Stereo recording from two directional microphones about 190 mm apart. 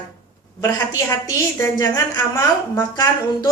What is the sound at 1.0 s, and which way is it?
A woman's voice, 15° left (ahead or behind).